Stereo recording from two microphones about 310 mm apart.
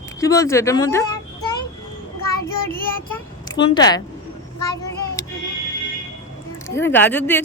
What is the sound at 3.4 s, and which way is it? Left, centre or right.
Speech, centre.